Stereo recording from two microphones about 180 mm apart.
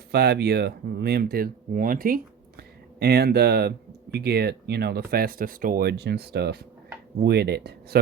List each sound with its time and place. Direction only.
0.1 s speech: 65° right (ahead or behind)